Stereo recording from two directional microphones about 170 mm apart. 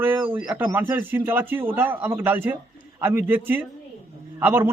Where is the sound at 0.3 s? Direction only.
30° right (ahead or behind).